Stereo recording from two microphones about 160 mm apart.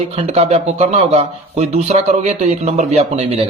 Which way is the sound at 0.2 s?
40° right (ahead or behind).